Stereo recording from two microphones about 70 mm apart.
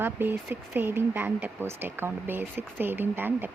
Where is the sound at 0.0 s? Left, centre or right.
Right.